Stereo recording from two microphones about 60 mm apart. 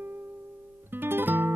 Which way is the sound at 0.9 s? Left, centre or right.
Right.